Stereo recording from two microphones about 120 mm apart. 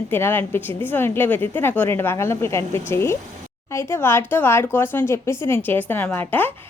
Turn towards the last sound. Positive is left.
turn(degrees=15)  # may be behind; listen again after turning